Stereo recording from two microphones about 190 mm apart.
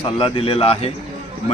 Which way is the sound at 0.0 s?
30° left (ahead or behind).